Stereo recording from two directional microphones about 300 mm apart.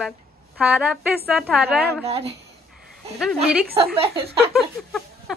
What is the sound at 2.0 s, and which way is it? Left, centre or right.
Speech, centre.